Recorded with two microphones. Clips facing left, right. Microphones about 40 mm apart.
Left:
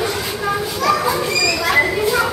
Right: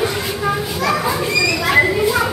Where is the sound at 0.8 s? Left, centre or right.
Centre.